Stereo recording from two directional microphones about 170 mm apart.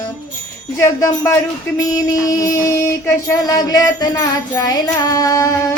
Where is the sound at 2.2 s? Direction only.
20° left (ahead or behind).